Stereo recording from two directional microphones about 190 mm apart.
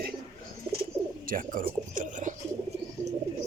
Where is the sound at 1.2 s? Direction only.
45° right (ahead or behind).